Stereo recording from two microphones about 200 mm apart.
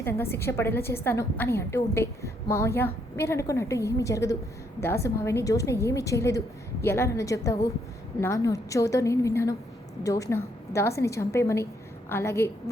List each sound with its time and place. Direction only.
0.0 s a woman's voice: 10° left (ahead or behind)